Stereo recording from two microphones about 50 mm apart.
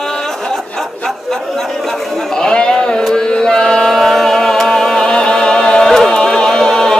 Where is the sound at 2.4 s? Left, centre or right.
Centre.